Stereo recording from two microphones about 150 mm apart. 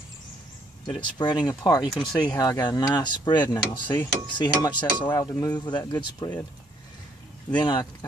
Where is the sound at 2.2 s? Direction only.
25° left (ahead or behind).